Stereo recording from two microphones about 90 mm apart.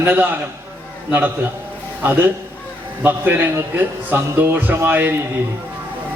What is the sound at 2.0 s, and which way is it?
A man's voice, 20° right (ahead or behind).